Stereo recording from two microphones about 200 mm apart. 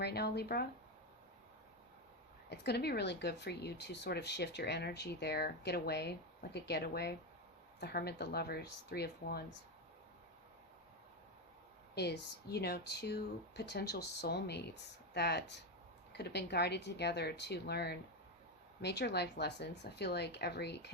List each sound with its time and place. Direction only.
0.0 s speech: 55° left (ahead or behind)
2.5 s speech: 55° left (ahead or behind)
11.9 s speech: 55° left (ahead or behind)